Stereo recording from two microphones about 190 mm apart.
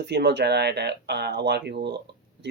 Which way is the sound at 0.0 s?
60° right (ahead or behind).